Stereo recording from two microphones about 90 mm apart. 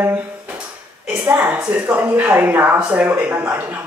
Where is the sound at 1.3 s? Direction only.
10° right (ahead or behind).